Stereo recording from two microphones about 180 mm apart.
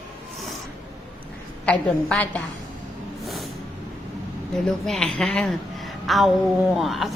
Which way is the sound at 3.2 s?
Centre (ahead or behind).